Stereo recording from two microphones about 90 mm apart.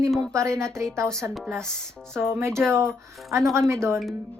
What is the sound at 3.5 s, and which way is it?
Speech, 30° right (ahead or behind).